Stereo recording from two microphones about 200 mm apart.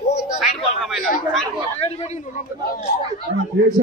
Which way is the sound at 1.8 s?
30° left (ahead or behind).